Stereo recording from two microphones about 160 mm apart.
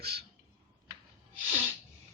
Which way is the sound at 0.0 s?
80° right.